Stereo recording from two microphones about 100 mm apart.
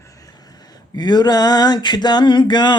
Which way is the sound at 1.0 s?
45° left (ahead or behind).